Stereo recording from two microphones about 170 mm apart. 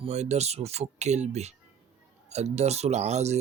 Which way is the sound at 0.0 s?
40° right (ahead or behind).